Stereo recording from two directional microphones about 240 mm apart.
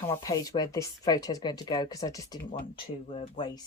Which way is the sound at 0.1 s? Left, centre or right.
Centre.